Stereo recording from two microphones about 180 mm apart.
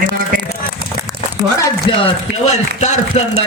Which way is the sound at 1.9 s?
30° left (ahead or behind).